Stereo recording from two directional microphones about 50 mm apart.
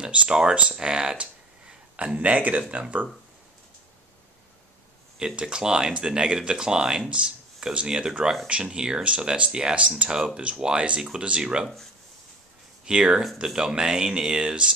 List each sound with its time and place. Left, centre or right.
0.0 s speech: right
5.2 s speech: centre
12.8 s speech: centre